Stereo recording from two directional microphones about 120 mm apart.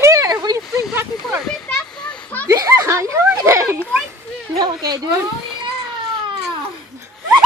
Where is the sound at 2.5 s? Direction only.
25° right (ahead or behind).